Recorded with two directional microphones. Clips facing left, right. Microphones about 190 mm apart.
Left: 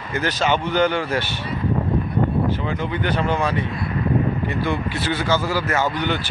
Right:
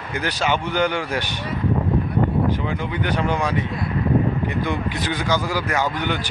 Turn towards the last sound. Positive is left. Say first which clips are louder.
# left 1 dB
turn(degrees=-15)  # may be behind; listen again after turning